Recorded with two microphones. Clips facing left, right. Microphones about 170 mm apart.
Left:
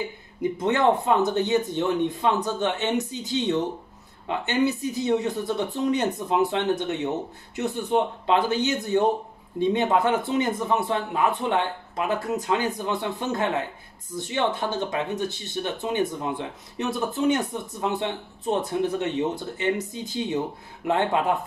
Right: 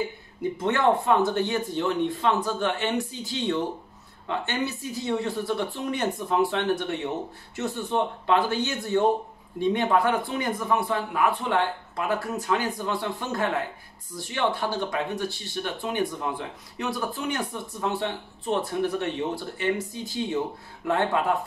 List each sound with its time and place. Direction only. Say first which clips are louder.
0.4 s speech: left 2 dB; 20° left (ahead or behind)